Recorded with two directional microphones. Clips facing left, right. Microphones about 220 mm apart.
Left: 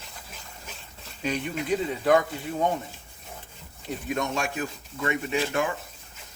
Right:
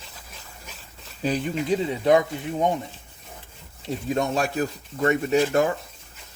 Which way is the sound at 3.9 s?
30° right (ahead or behind).